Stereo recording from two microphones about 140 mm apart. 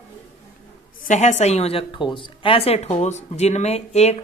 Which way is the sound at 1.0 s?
60° left (ahead or behind).